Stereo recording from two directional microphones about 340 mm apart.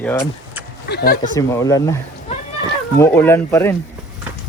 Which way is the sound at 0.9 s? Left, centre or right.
Left.